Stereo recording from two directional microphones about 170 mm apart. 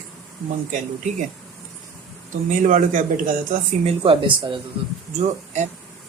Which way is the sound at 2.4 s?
50° right (ahead or behind).